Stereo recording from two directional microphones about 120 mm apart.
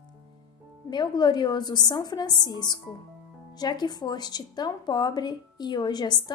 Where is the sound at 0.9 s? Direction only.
35° left (ahead or behind).